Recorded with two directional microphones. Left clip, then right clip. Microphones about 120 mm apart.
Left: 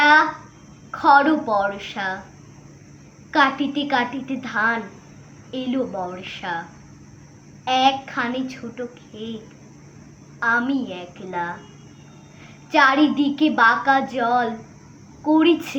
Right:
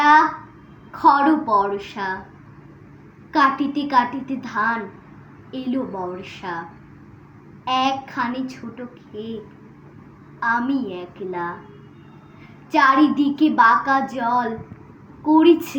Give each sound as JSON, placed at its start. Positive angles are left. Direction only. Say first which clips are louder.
{"t": 0.0, "sound": "a sound", "louder": "right 1 dB", "side_deg": 20}
{"t": 1.5, "sound": "speech", "louder": "right 2 dB", "side_deg": 20}
{"t": 3.3, "sound": "speech", "louder": "right 1 dB", "side_deg": 20}
{"t": 7.6, "sound": "speech", "louder": "left 2 dB", "side_deg": 20}
{"t": 10.4, "sound": "a woman's voice", "louder": "left 1 dB", "side_deg": 20}
{"t": 12.7, "sound": "a woman's voice", "louder": "right 1 dB", "side_deg": 20}